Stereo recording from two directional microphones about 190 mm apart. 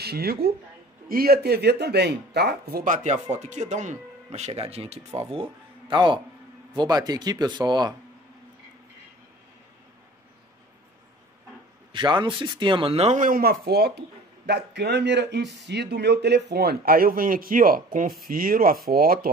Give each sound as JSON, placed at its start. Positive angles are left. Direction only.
{"t": 0.0, "sound": "speech", "side_deg": -55}
{"t": 11.9, "sound": "speech", "side_deg": -25}